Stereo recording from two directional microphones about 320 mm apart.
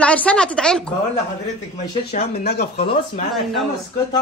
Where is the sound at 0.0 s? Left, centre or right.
Centre.